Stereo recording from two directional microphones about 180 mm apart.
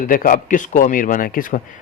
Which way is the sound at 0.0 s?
50° left (ahead or behind).